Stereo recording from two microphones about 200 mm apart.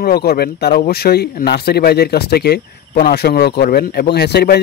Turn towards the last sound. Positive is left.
turn(degrees=55)  # may be behind; listen again after turning